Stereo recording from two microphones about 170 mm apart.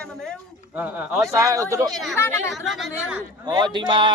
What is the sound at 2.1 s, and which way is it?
Speech, 15° left (ahead or behind).